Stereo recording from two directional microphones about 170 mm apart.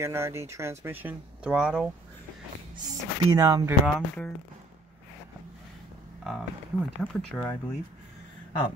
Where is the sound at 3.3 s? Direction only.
20° right (ahead or behind).